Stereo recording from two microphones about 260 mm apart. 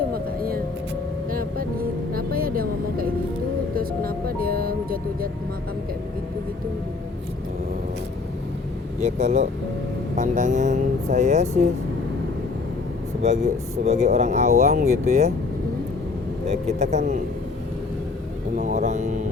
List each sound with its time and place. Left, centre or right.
0.1 s music: right
9.0 s speech: right
13.2 s speech: right
16.5 s speech: right
18.5 s speech: right